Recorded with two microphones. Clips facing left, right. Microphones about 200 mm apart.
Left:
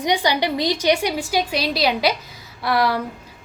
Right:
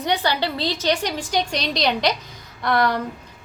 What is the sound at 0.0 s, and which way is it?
A woman's voice, 10° left (ahead or behind).